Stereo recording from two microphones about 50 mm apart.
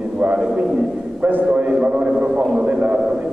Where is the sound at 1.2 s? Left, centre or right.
Right.